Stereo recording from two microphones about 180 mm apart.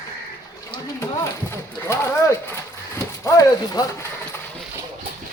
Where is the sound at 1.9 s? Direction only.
15° left (ahead or behind).